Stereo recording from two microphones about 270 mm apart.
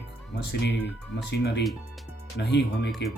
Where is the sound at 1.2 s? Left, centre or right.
Left.